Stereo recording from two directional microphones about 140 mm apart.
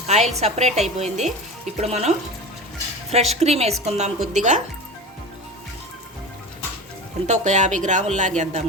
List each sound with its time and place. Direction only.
0.1 s a woman's voice: 50° right (ahead or behind)
4.4 s speech: 60° right (ahead or behind)
7.3 s speech: 55° right (ahead or behind)